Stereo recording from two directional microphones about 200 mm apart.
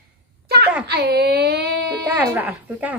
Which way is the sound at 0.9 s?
55° right (ahead or behind).